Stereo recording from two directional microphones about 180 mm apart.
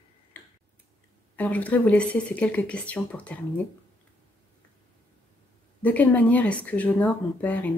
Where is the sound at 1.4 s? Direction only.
10° left (ahead or behind).